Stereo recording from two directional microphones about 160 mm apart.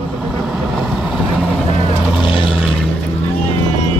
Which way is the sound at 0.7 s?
Centre (ahead or behind).